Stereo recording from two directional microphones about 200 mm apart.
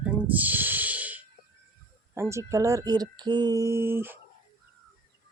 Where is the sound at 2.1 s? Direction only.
15° right (ahead or behind).